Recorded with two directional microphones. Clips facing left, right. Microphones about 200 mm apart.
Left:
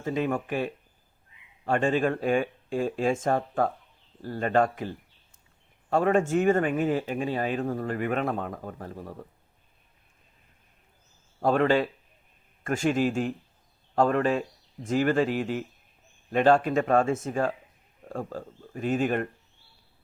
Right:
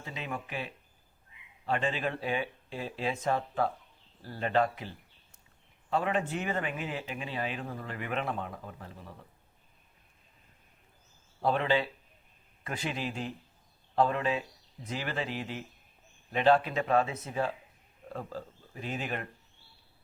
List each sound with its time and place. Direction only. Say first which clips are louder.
0.0 s speech: left 12 dB; 50° left (ahead or behind)
11.3 s speech: left 6 dB; 50° left (ahead or behind)